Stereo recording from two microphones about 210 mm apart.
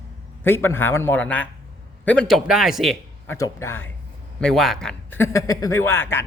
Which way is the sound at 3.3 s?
15° left (ahead or behind).